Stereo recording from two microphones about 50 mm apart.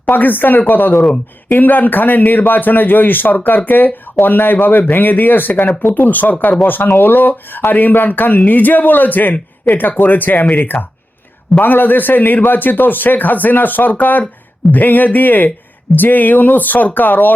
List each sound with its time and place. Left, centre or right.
0.1 s speech: left